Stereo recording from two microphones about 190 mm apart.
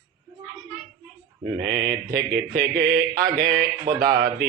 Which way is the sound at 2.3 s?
55° right (ahead or behind).